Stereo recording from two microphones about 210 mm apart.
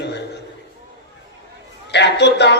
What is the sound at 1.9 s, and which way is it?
Speech, 55° left (ahead or behind).